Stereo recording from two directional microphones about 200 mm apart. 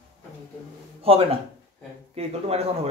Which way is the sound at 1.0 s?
30° right (ahead or behind).